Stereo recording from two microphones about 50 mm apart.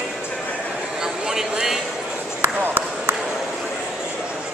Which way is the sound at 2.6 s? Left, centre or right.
Right.